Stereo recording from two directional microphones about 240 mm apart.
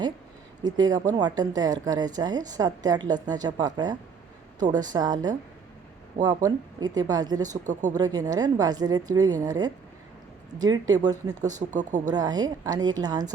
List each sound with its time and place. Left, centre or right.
0.6 s speech: centre
7.7 s speech: right
7.9 s speech: centre
11.6 s speech: right
12.1 s speech: centre